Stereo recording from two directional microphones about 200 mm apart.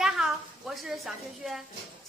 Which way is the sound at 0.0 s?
Centre (ahead or behind).